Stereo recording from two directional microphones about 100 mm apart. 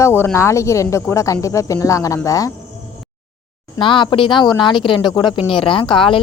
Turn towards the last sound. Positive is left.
turn(degrees=55)  # may be behind; listen again after turning